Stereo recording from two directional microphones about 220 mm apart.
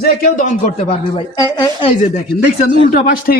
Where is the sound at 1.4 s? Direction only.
20° left (ahead or behind).